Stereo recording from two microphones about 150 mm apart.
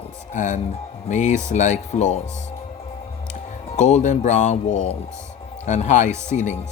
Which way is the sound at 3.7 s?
50° left (ahead or behind).